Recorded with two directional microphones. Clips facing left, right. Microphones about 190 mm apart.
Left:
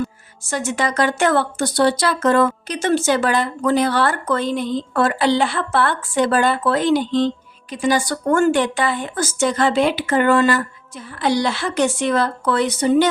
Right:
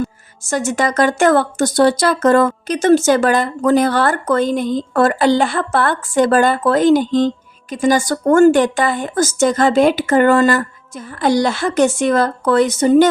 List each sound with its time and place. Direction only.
0.4 s speech: 45° right (ahead or behind)